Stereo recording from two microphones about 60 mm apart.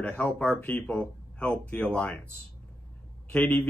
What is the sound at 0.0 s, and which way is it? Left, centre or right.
Speech, left.